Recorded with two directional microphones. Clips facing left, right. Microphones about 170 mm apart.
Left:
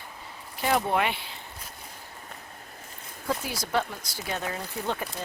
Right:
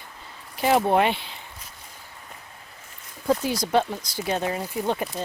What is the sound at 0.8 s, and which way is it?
Speech, 30° right (ahead or behind).